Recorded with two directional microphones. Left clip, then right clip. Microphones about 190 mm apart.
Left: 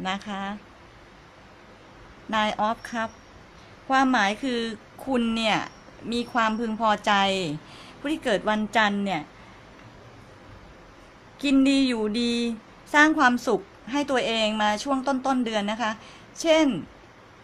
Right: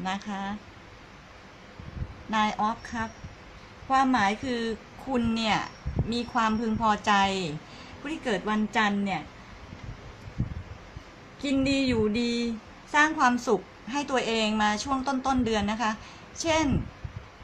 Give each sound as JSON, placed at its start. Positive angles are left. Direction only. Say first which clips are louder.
{"t": 0.0, "sound": "a woman's voice", "louder": "left 2 dB", "side_deg": 40}
{"t": 2.3, "sound": "a woman's voice", "louder": "left 2 dB", "side_deg": 40}
{"t": 11.4, "sound": "a woman's voice", "louder": "left 5 dB", "side_deg": 45}